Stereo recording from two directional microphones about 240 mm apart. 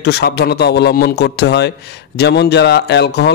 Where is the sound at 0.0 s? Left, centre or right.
Left.